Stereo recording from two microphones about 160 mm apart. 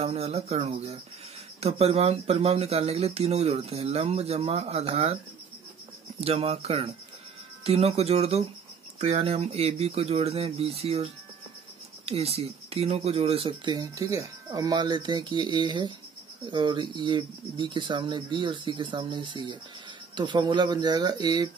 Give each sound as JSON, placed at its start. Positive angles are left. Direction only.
{"t": 0.0, "sound": "speech", "side_deg": -40}
{"t": 6.2, "sound": "speech", "side_deg": -40}
{"t": 12.1, "sound": "speech", "side_deg": -40}